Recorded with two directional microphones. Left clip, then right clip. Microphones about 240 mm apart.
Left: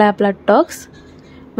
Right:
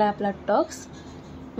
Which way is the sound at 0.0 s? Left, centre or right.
Left.